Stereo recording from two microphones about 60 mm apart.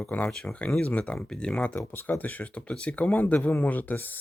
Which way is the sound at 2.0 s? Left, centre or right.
Left.